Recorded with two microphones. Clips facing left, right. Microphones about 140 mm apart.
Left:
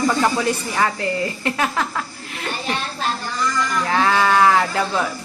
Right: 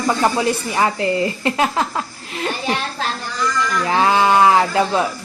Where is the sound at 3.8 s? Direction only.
20° right (ahead or behind).